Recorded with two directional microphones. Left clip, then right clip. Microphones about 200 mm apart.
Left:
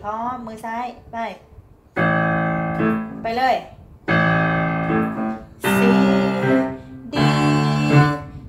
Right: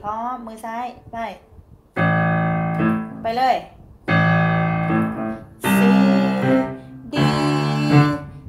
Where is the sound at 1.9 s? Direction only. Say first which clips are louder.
Left 1 dB; 55° right (ahead or behind).